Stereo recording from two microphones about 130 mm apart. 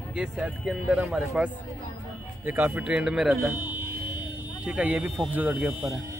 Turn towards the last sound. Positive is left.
turn(degrees=-5)  # may be behind; listen again after turning